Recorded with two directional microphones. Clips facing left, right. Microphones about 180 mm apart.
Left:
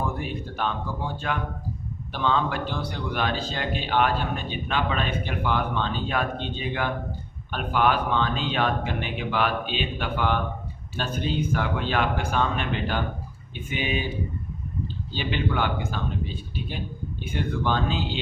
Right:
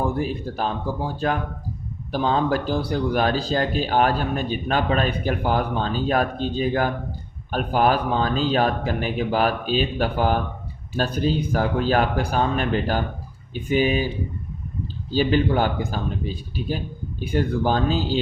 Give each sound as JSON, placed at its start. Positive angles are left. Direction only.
{"t": 0.0, "sound": "speech", "side_deg": -35}
{"t": 15.1, "sound": "speech", "side_deg": -40}